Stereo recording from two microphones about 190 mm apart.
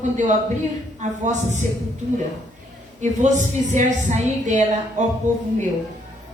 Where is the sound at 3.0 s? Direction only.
40° right (ahead or behind).